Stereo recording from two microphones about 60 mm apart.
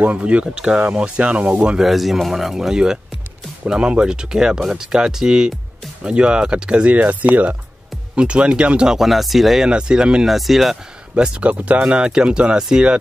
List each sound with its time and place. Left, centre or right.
0.0 s speech: right
1.8 s speech: centre
9.7 s speech: centre
10.2 s speech: centre
11.1 s speech: centre